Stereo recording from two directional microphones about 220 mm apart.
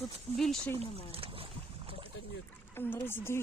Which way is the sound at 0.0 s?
Centre (ahead or behind).